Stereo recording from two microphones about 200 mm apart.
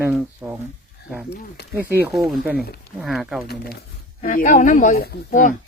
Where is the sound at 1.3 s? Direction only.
55° left (ahead or behind).